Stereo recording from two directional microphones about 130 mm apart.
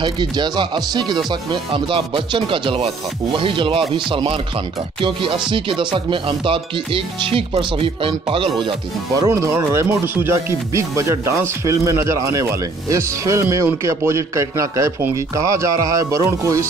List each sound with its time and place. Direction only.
0.0 s speech: 35° right (ahead or behind)
9.1 s speech: 25° right (ahead or behind)